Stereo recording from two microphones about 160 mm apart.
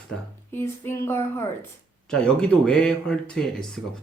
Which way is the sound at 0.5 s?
15° left (ahead or behind).